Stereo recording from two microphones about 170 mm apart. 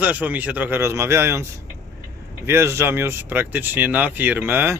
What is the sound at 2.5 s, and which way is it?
Speech, 15° right (ahead or behind).